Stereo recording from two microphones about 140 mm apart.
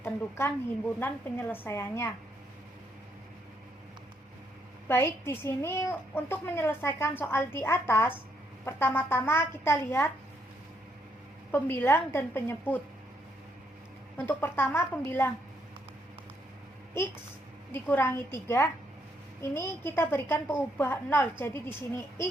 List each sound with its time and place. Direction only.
0.0 s a woman's voice: 15° left (ahead or behind)
4.9 s a woman's voice: 20° left (ahead or behind)
11.5 s a woman's voice: 15° left (ahead or behind)
14.3 s a woman's voice: 15° left (ahead or behind)
17.7 s a woman's voice: 15° left (ahead or behind)